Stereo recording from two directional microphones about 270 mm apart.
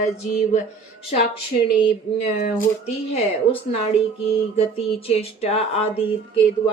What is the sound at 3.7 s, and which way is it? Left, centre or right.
Speech, left.